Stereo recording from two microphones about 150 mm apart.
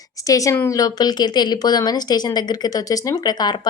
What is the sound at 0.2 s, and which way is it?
A woman's voice, 20° left (ahead or behind).